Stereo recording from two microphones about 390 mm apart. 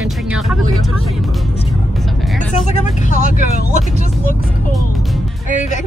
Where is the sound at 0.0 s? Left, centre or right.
Centre.